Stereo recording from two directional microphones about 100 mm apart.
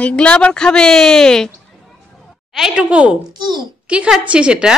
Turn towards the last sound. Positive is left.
turn(degrees=-10)  # may be behind; listen again after turning